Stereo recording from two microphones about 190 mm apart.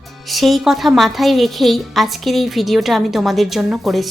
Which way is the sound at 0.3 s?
Centre (ahead or behind).